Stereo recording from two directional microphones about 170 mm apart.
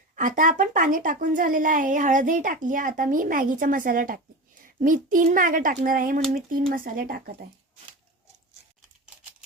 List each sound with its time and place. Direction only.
0.2 s a woman's voice: 50° right (ahead or behind)